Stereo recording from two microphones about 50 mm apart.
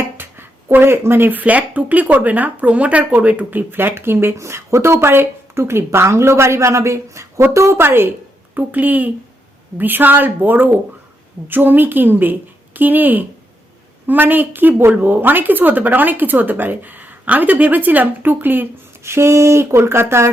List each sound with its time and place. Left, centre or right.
0.2 s a sound: right
1.4 s speech: right
7.5 s speech: right
7.8 s speech: right
8.5 s speech: right
19.0 s speech: right